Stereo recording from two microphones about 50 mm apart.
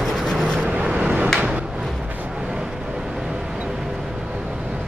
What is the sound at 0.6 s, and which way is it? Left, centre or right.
Vehicle, right.